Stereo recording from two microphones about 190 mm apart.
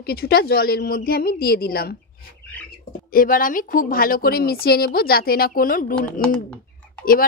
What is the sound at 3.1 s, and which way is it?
A woman's voice, 45° left (ahead or behind).